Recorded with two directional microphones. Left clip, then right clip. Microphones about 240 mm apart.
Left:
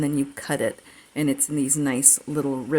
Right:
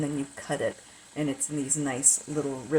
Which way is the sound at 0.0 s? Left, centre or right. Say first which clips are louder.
Left 7 dB; left.